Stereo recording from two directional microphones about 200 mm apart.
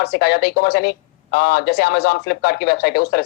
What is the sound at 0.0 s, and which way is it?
Speech, 55° left (ahead or behind).